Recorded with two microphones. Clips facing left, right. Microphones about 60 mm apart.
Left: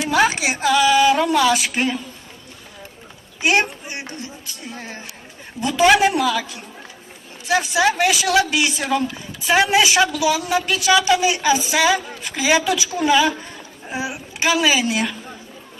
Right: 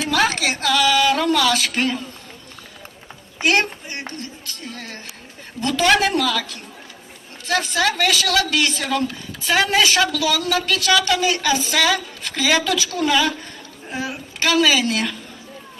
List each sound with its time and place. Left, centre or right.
0.0 s a woman's voice: centre
3.4 s a woman's voice: centre